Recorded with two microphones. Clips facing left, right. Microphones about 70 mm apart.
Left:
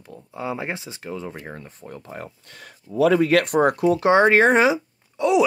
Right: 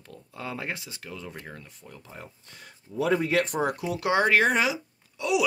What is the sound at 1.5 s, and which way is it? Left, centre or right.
Speech, left.